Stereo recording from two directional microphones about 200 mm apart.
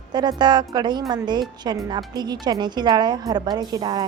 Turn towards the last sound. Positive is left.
turn(degrees=-20)  # may be behind; listen again after turning